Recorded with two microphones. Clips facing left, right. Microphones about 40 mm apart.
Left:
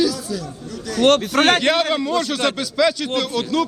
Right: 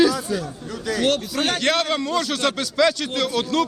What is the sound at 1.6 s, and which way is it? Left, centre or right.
A man's voice, centre.